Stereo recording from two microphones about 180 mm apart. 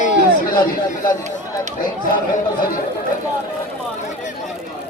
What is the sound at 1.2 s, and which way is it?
Speech, 40° right (ahead or behind).